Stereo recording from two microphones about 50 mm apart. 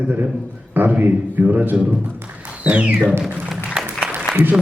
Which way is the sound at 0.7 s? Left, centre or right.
Right.